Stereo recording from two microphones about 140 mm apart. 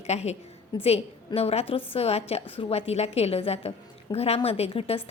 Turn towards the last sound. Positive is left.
turn(degrees=45)  # may be behind; listen again after turning